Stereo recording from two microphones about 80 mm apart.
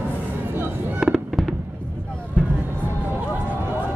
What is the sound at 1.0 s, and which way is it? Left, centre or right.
Fireworks, centre.